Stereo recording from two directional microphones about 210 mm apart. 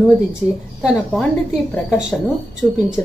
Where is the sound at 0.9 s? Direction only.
Centre (ahead or behind).